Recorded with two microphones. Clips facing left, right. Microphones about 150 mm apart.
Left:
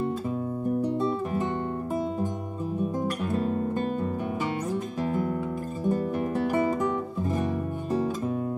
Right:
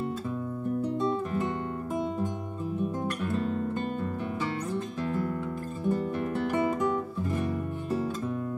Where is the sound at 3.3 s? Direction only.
45° left (ahead or behind).